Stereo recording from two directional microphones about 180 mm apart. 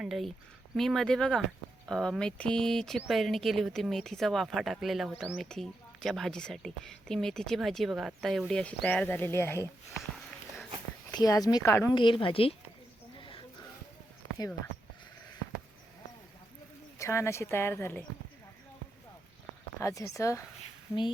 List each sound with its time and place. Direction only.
0.0 s speech: centre (ahead or behind)
11.1 s speech: 20° left (ahead or behind)
11.9 s speech: 30° left (ahead or behind)
13.1 s a sound: 30° left (ahead or behind)
17.0 s speech: 15° left (ahead or behind)
19.8 s speech: 15° left (ahead or behind)